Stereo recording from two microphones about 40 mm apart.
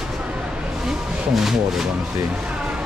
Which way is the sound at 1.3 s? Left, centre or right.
Centre.